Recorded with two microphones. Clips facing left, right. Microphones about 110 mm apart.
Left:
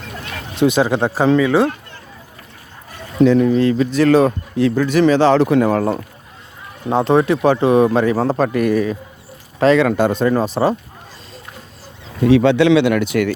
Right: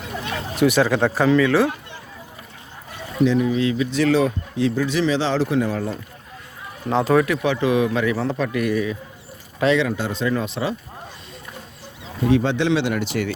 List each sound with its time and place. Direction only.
0.5 s speech: 20° left (ahead or behind)
3.2 s speech: 55° left (ahead or behind)
7.1 s speech: 25° left (ahead or behind)
7.4 s a man's voice: 40° left (ahead or behind)
9.8 s speech: 55° left (ahead or behind)
12.3 s speech: 75° left (ahead or behind); by 13.3 s 60° left (ahead or behind)